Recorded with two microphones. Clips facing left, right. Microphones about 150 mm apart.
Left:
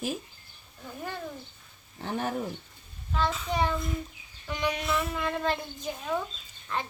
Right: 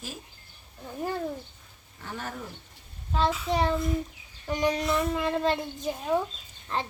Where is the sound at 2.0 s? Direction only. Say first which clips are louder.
Left 6 dB; 25° left (ahead or behind).